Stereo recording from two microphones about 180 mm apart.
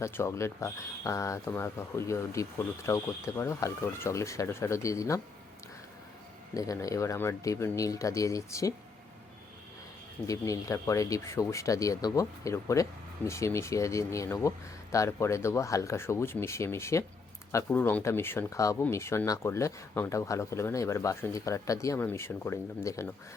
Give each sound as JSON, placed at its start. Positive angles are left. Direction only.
{"t": 0.0, "sound": "speech", "side_deg": 15}
{"t": 6.5, "sound": "speech", "side_deg": 20}
{"t": 10.2, "sound": "speech", "side_deg": 20}